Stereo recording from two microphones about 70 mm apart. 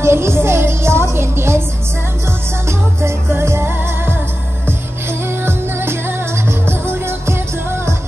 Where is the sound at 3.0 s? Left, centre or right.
Right.